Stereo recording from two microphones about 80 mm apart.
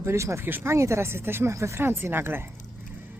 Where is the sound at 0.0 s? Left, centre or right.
Right.